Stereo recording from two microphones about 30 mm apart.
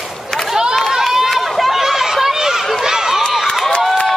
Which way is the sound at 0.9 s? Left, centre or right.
Centre.